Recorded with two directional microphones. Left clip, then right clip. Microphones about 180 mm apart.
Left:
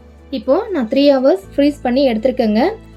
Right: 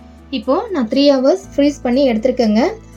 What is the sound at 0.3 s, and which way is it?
A woman's voice, 30° right (ahead or behind).